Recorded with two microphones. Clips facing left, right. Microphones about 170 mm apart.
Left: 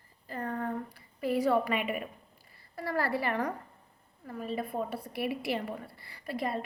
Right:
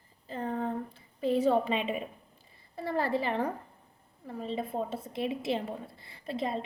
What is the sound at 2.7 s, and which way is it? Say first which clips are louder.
A woman's voice: right 1 dB; 25° right (ahead or behind).